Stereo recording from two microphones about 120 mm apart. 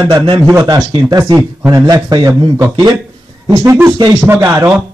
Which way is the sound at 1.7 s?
30° right (ahead or behind).